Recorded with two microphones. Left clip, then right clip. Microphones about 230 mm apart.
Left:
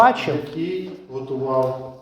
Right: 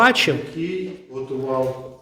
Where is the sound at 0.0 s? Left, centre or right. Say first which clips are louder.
Even; right.